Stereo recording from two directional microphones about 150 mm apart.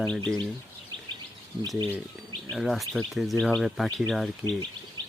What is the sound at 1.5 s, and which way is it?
Speech, 30° right (ahead or behind).